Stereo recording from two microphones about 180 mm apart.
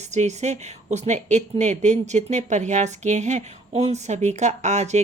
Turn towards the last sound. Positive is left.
turn(degrees=-40)  # may be behind; listen again after turning